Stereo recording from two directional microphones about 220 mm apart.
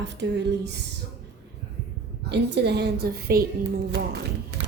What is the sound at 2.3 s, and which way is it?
Speech, 50° right (ahead or behind).